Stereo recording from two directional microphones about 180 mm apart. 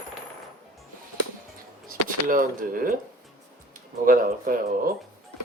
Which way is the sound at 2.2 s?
50° right (ahead or behind).